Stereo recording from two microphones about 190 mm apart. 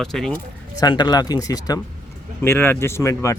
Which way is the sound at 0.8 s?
20° left (ahead or behind).